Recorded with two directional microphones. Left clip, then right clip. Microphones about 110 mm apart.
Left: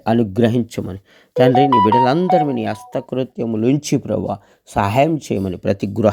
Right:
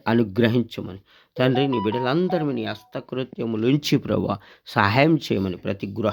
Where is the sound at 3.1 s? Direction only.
30° left (ahead or behind).